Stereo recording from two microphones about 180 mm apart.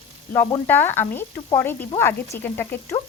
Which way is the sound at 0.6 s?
10° left (ahead or behind).